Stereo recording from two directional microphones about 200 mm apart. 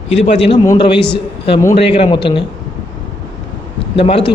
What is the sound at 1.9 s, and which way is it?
Speech, 25° left (ahead or behind).